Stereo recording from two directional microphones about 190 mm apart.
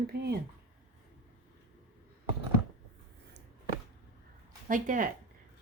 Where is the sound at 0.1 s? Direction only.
55° right (ahead or behind).